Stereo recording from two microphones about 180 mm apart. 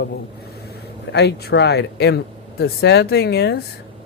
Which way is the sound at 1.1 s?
65° left (ahead or behind).